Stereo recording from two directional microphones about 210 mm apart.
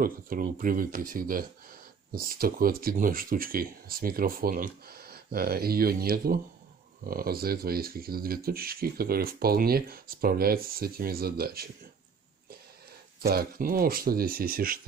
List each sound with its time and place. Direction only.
0.0 s speech: 40° right (ahead or behind)
13.2 s speech: 45° right (ahead or behind)